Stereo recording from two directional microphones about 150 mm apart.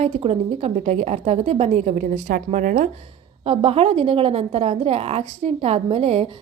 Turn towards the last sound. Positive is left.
turn(degrees=-40)  # may be behind; listen again after turning